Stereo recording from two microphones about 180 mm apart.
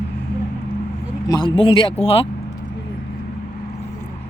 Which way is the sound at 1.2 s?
25° left (ahead or behind).